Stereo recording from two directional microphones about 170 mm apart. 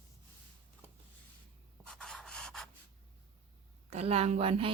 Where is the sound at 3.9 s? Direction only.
35° right (ahead or behind).